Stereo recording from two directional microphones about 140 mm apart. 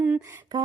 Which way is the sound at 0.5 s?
30° right (ahead or behind).